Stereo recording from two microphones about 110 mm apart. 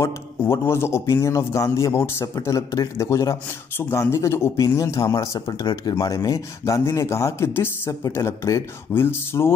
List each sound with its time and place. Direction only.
0.0 s a man's voice: 25° left (ahead or behind)